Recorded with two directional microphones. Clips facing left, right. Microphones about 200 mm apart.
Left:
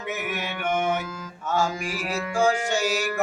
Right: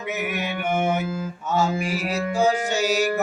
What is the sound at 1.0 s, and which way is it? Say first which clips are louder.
Music: right 5 dB; 30° right (ahead or behind).